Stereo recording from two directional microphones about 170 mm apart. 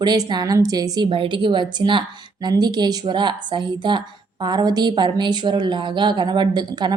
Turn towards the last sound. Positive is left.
turn(degrees=-25)  # may be behind; listen again after turning